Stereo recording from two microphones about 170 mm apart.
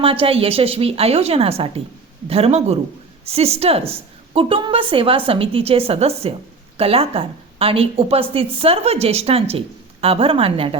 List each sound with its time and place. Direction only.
0.0 s a woman's voice: 35° right (ahead or behind)